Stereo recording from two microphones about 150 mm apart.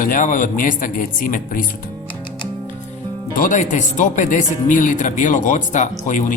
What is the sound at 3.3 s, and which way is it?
Speech, 65° left (ahead or behind).